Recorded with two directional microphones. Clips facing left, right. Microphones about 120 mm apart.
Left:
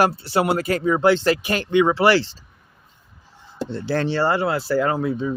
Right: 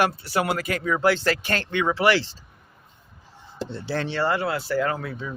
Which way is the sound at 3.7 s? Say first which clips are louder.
Left 5 dB; 50° left (ahead or behind).